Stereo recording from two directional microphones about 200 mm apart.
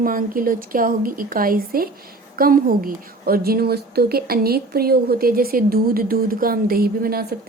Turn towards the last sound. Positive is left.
turn(degrees=-50)  # may be behind; listen again after turning